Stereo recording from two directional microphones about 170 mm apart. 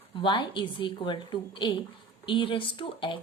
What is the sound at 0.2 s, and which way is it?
A woman's voice, 30° left (ahead or behind).